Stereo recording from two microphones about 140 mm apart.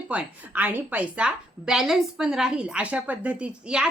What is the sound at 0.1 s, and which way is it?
A woman's voice, 10° right (ahead or behind).